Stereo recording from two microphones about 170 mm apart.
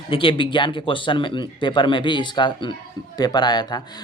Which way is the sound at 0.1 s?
30° left (ahead or behind).